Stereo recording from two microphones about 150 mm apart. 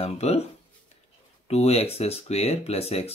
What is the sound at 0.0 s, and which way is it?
Speech, 45° left (ahead or behind).